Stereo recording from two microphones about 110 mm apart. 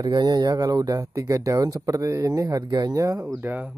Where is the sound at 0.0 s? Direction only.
35° right (ahead or behind).